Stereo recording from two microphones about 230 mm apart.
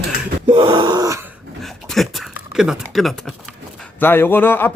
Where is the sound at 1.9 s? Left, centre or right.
Centre.